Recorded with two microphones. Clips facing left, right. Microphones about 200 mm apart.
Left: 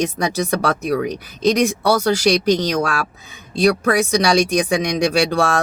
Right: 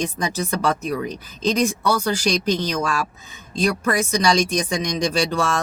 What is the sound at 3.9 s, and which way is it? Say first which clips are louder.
Speech: left 3 dB; 65° left (ahead or behind).